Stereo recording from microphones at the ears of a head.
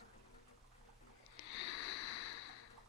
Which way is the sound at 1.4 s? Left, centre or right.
Left.